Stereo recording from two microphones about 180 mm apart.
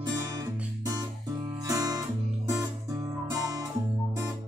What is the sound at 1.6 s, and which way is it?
Guitar, 20° right (ahead or behind).